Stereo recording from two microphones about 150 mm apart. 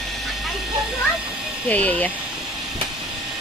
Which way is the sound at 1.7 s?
10° left (ahead or behind).